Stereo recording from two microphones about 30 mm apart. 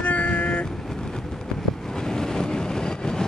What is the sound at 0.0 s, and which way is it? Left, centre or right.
Vehicle, left.